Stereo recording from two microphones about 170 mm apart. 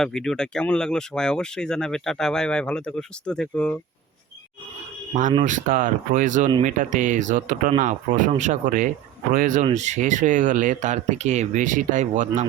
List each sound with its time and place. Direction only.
0.0 s speech: 5° left (ahead or behind)
5.5 s speech: 50° right (ahead or behind)